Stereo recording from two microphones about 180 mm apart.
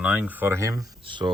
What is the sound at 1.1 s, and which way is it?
Speech, 25° right (ahead or behind).